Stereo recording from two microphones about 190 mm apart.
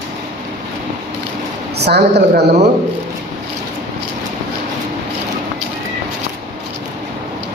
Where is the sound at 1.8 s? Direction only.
60° right (ahead or behind).